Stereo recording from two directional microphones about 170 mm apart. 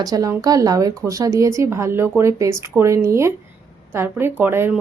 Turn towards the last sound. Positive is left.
turn(degrees=-10)  # may be behind; listen again after turning